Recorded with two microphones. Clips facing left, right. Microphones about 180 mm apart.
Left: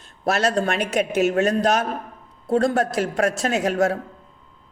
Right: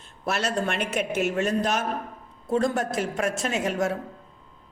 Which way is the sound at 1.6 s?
40° left (ahead or behind).